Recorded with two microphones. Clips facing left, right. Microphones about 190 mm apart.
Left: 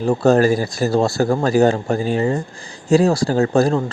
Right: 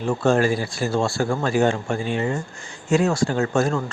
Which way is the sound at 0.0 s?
40° left (ahead or behind).